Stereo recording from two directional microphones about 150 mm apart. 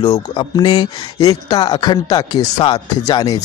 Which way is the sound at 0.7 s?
40° left (ahead or behind).